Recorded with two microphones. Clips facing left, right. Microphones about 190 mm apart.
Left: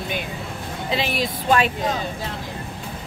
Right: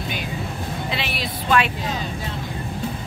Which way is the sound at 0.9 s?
40° left (ahead or behind).